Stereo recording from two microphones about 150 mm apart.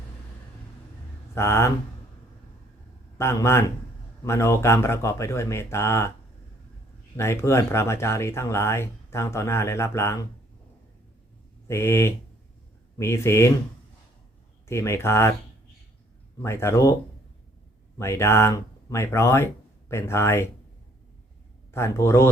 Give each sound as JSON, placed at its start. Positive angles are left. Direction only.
{"t": 1.4, "sound": "speech", "side_deg": 15}
{"t": 3.2, "sound": "speech", "side_deg": 15}
{"t": 7.2, "sound": "speech", "side_deg": 20}
{"t": 11.7, "sound": "speech", "side_deg": 15}
{"t": 14.7, "sound": "speech", "side_deg": 20}
{"t": 16.4, "sound": "speech", "side_deg": 15}
{"t": 17.9, "sound": "speech", "side_deg": 20}
{"t": 21.7, "sound": "speech", "side_deg": 20}